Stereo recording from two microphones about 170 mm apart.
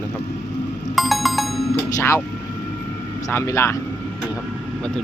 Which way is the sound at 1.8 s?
20° left (ahead or behind).